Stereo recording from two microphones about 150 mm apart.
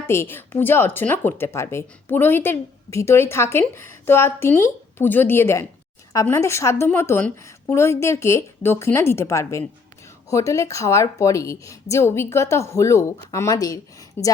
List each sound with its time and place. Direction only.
0.1 s a woman's voice: 15° left (ahead or behind)